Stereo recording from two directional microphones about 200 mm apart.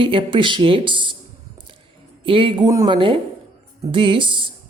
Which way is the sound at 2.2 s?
25° right (ahead or behind).